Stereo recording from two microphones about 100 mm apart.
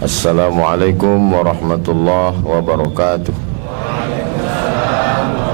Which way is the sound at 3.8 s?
15° right (ahead or behind).